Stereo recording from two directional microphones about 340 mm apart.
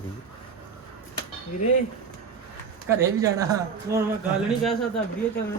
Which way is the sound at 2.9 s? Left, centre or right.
Centre.